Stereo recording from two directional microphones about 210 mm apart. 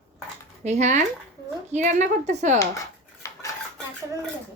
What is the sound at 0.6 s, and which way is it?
Speech, 35° right (ahead or behind).